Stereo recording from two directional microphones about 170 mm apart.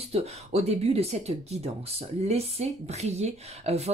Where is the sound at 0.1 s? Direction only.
35° right (ahead or behind).